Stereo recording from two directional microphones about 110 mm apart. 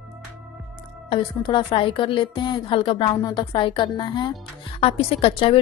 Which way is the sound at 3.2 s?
40° left (ahead or behind).